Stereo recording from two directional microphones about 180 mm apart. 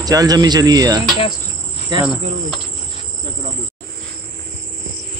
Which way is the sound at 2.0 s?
5° right (ahead or behind).